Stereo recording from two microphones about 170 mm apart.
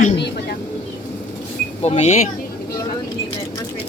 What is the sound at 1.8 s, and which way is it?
Speech, 35° left (ahead or behind).